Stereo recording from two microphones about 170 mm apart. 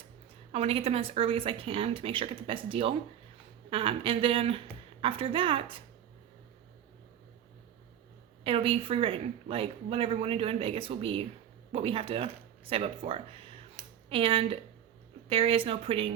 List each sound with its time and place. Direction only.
0.5 s a woman's voice: 35° right (ahead or behind)
8.4 s a woman's voice: 30° right (ahead or behind)